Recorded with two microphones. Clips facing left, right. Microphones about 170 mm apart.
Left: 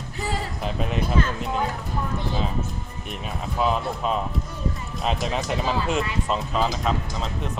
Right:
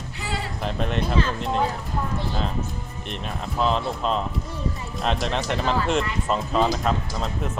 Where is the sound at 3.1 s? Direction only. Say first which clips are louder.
Even; 5° left (ahead or behind).